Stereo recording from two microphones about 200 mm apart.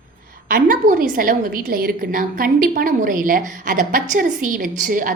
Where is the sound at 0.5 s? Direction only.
45° right (ahead or behind).